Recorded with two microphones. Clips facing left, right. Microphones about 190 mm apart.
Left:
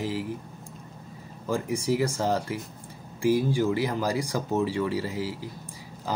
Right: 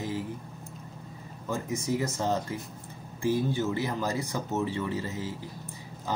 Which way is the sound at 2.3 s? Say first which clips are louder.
Left 2 dB; 10° left (ahead or behind).